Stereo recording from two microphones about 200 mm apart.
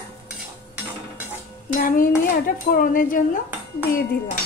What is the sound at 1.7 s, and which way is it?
Dishes, 45° left (ahead or behind).